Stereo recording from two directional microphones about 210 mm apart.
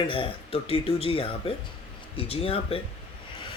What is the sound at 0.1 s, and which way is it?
Speech, 25° left (ahead or behind).